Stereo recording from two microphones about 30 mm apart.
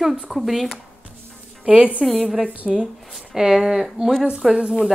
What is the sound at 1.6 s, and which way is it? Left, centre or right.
Speech, right.